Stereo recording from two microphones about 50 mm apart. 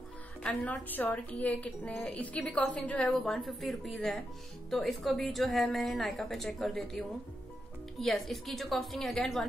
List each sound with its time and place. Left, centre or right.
0.4 s a woman's voice: left
3.1 s a woman's voice: centre